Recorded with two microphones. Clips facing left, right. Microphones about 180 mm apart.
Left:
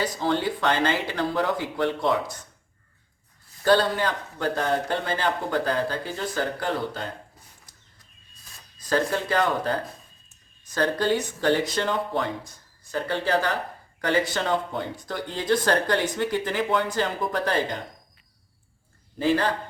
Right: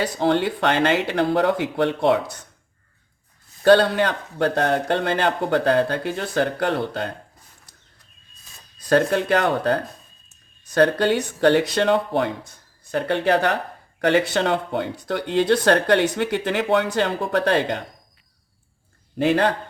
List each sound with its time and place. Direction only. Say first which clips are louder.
0.0 s speech: right 5 dB; 65° right (ahead or behind)
3.6 s speech: right 6 dB; 70° right (ahead or behind)
8.9 s speech: right 6 dB; 65° right (ahead or behind)
19.2 s speech: right 4 dB; 65° right (ahead or behind)